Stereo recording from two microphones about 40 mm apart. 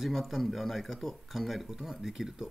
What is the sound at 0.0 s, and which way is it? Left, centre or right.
Speech, centre.